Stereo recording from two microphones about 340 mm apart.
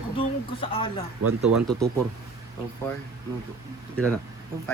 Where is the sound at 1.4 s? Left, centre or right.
Centre.